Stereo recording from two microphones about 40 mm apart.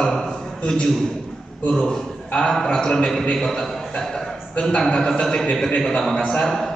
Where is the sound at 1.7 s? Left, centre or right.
Centre.